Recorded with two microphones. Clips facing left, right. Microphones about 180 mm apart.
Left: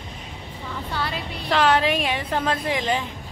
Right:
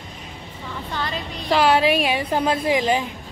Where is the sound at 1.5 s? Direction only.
10° right (ahead or behind).